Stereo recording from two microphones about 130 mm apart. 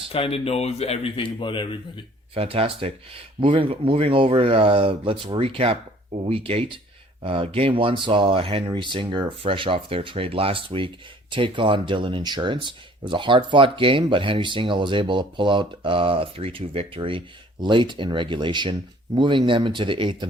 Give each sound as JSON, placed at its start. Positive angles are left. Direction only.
{"t": 0.1, "sound": "speech", "side_deg": 50}
{"t": 2.3, "sound": "speech", "side_deg": -45}